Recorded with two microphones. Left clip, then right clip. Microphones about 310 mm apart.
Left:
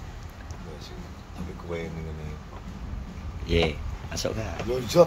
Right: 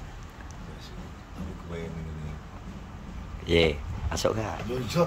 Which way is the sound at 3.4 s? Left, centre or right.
Centre.